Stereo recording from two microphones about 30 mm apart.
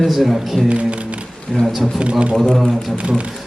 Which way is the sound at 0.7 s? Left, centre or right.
Right.